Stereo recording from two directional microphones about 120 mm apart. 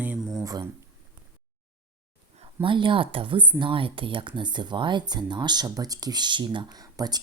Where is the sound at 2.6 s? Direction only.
45° right (ahead or behind).